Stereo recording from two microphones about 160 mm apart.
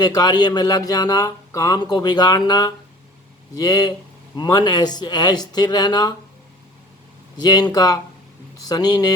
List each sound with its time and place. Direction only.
0.0 s speech: 25° left (ahead or behind)
7.3 s speech: 25° left (ahead or behind)